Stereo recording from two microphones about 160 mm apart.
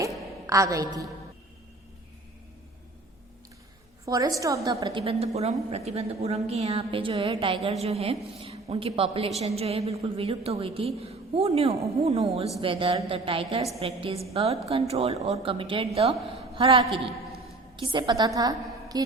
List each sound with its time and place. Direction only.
0.4 s a woman's voice: 20° right (ahead or behind)
4.0 s a woman's voice: 20° right (ahead or behind)